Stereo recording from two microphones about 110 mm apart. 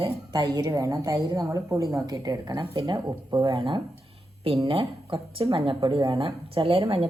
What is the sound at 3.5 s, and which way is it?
A woman's voice, 50° right (ahead or behind).